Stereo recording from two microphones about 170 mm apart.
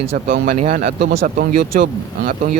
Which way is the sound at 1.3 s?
55° right (ahead or behind).